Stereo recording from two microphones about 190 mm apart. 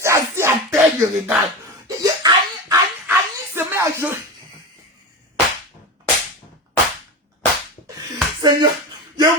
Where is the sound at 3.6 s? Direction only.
15° right (ahead or behind).